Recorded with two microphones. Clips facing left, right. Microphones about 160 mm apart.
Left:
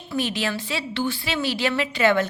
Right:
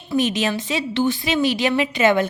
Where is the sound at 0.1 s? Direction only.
20° right (ahead or behind).